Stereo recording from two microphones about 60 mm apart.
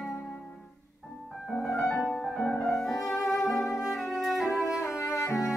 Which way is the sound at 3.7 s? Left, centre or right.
Left.